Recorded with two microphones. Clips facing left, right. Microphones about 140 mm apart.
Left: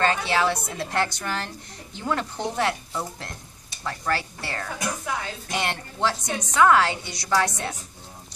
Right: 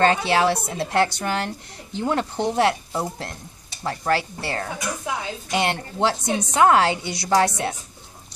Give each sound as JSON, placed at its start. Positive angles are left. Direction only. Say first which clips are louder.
{"t": 0.0, "sound": "a woman's voice", "louder": "right 4 dB", "side_deg": -30}